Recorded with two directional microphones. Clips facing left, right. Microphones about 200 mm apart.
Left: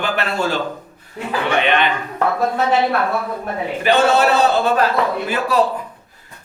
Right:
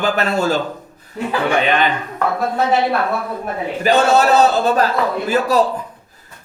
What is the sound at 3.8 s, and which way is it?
Speech, 40° right (ahead or behind).